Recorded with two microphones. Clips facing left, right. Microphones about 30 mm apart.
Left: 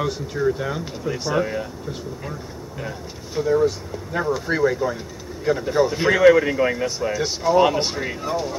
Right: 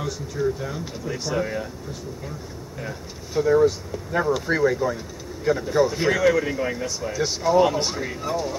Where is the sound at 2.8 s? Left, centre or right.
Centre.